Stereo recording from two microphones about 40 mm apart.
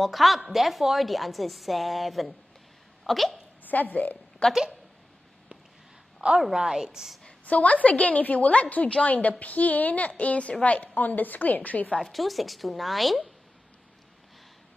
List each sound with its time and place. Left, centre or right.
0.0 s a woman's voice: centre
3.6 s a woman's voice: left
4.4 s speech: left
6.2 s a woman's voice: right
6.5 s a woman's voice: centre
7.2 s a woman's voice: left
12.0 s a woman's voice: centre